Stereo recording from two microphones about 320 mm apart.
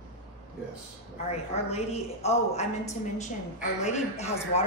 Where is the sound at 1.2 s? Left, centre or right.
Centre.